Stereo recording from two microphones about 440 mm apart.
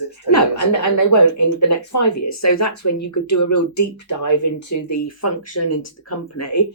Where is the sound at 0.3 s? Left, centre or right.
Left.